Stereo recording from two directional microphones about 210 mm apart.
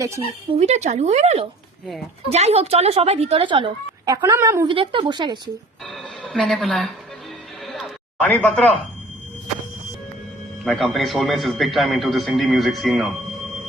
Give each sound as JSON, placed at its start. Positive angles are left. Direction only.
{"t": 0.5, "sound": "a woman's voice", "side_deg": -30}
{"t": 5.8, "sound": "music", "side_deg": 0}
{"t": 7.6, "sound": "a sound", "side_deg": 0}
{"t": 10.6, "sound": "a man's voice", "side_deg": 0}